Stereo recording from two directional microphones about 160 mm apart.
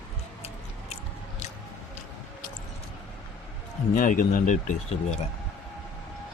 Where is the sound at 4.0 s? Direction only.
55° left (ahead or behind).